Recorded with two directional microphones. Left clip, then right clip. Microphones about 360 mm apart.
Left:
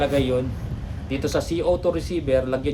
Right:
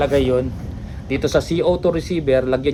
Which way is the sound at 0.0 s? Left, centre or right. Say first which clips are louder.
Right 5 dB; centre.